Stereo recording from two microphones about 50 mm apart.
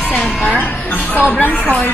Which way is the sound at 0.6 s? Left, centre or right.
Left.